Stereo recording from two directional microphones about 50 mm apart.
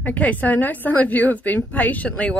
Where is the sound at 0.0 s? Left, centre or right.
Left.